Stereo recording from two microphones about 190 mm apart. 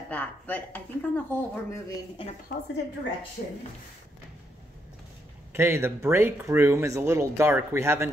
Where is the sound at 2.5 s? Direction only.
45° left (ahead or behind).